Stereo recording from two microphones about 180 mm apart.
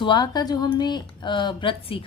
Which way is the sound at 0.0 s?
25° left (ahead or behind).